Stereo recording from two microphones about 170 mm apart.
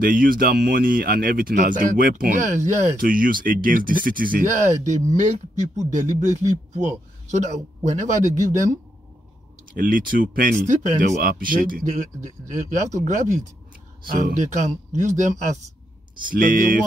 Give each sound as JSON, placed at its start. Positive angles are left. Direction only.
{"t": 0.0, "sound": "speech", "side_deg": -55}
{"t": 9.8, "sound": "speech", "side_deg": -55}